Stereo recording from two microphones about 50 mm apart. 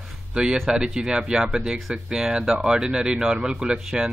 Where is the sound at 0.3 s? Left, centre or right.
Centre.